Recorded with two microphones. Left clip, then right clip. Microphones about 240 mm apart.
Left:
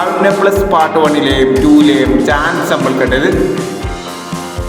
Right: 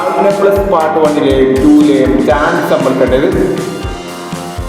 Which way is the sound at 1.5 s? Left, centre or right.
Centre.